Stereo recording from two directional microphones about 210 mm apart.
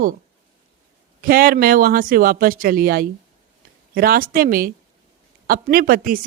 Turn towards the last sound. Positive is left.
turn(degrees=-40)  # may be behind; listen again after turning